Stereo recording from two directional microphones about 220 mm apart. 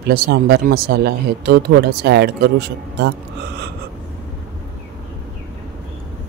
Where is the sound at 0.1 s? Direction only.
45° right (ahead or behind).